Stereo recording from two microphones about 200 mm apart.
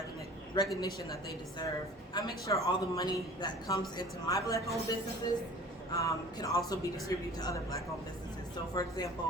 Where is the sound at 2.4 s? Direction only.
15° left (ahead or behind).